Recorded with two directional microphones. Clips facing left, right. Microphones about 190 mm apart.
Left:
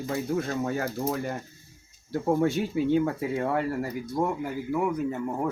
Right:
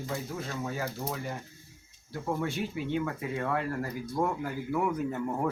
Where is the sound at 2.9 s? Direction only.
35° left (ahead or behind).